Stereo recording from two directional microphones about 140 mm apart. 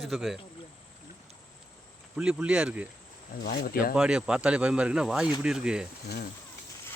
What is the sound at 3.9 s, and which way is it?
A man's voice, 5° right (ahead or behind).